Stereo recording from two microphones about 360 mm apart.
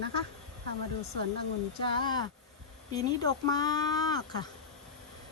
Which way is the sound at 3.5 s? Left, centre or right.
Centre.